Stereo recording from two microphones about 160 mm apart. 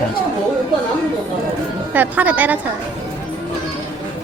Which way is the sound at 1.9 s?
10° right (ahead or behind).